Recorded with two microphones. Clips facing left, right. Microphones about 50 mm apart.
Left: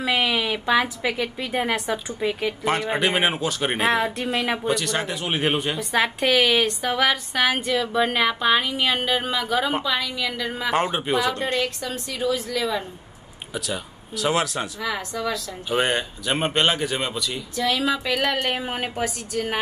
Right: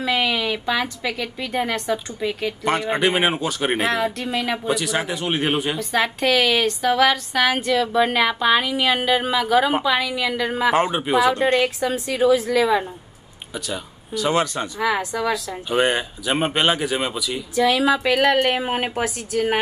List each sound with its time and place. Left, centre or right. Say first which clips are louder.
0.0 s a woman's voice: right 1 dB; centre
2.6 s a woman's voice: right 3 dB; centre
11.3 s a woman's voice: right 6 dB; centre
13.5 s a woman's voice: even; centre
18.6 s a woman's voice: right 4 dB; centre